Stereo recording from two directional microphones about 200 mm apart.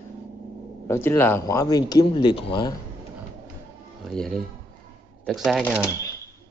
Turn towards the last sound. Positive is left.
turn(degrees=-5)  # may be behind; listen again after turning